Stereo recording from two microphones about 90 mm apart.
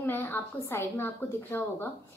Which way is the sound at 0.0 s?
20° left (ahead or behind).